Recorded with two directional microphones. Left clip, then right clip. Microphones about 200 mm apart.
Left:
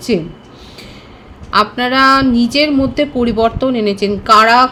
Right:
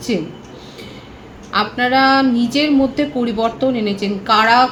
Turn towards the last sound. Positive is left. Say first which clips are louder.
# left 4 dB
turn(degrees=60)  # may be behind; listen again after turning